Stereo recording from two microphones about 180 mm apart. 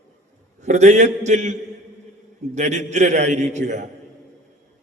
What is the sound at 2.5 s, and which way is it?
A man's voice, 40° right (ahead or behind).